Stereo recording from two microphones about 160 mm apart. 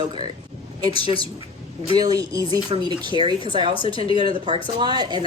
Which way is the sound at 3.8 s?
35° left (ahead or behind).